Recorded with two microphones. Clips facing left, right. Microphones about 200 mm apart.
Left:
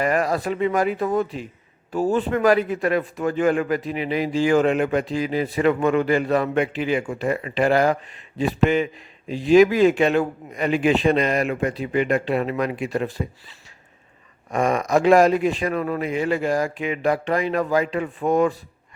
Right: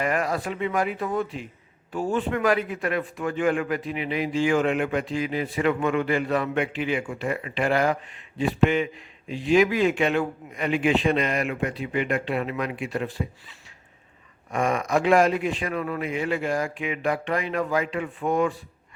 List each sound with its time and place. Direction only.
0.0 s a man's voice: 40° left (ahead or behind)
14.5 s a man's voice: 40° left (ahead or behind)